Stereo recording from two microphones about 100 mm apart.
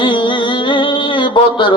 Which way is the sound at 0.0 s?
55° left (ahead or behind).